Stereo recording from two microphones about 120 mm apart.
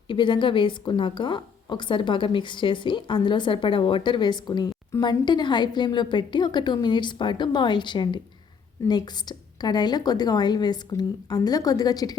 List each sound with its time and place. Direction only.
0.1 s a woman's voice: 40° left (ahead or behind)
9.6 s a woman's voice: 35° left (ahead or behind)